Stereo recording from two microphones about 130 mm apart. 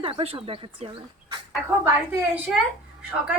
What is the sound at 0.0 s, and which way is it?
Speech, 45° right (ahead or behind).